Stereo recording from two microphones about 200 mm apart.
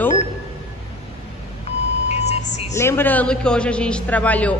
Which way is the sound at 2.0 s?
35° left (ahead or behind).